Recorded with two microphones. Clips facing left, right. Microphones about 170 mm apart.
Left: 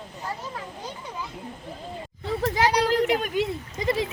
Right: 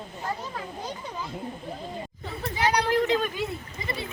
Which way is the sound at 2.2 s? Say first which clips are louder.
Left 5 dB; 90° left.